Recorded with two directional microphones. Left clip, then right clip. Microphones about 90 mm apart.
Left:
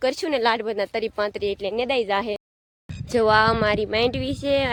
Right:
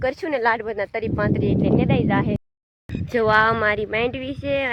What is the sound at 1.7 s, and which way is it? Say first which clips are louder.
Speech: right 1 dB; 50° left (ahead or behind).